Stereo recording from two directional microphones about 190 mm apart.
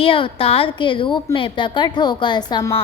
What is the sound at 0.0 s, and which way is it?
A woman's voice, 30° left (ahead or behind).